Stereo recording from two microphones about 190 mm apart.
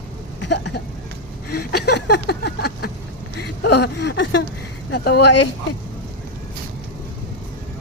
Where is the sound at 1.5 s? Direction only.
55° left (ahead or behind).